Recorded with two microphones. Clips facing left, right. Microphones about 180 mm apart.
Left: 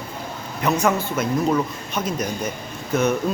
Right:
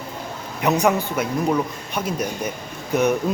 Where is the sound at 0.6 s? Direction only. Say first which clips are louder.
Right 1 dB; 15° right (ahead or behind).